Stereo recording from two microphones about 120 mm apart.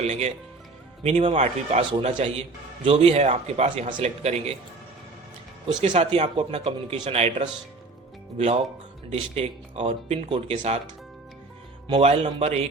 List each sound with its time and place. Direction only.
0.0 s speech: 65° right (ahead or behind)
1.0 s speech: 85° right
2.0 s a man's voice: 60° right (ahead or behind)
5.6 s a man's voice: 65° right (ahead or behind)
6.1 s a man's voice: 50° right (ahead or behind)
9.1 s a man's voice: 60° right (ahead or behind)
10.5 s a man's voice: 65° right (ahead or behind)
11.9 s a man's voice: 60° right (ahead or behind)